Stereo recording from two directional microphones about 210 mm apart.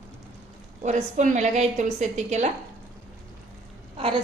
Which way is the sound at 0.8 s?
35° right (ahead or behind).